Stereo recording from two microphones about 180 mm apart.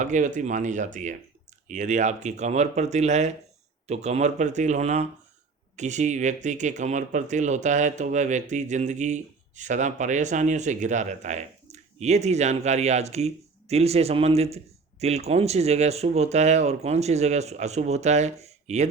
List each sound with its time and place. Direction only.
0.0 s speech: 45° right (ahead or behind)